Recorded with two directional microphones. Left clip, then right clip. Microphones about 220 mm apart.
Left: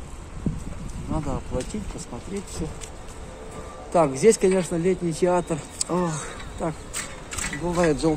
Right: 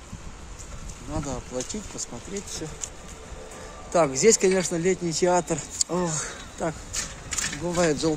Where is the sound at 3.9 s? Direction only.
25° right (ahead or behind).